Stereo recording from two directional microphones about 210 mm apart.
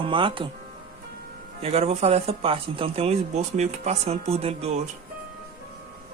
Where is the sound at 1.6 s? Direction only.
30° right (ahead or behind).